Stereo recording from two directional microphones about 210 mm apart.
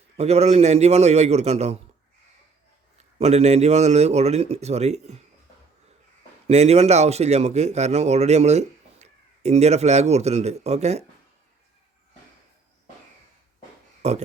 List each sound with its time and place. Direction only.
0.2 s speech: 30° right (ahead or behind)
3.2 s speech: 30° right (ahead or behind)
6.5 s speech: 30° right (ahead or behind)
14.0 s speech: 30° right (ahead or behind)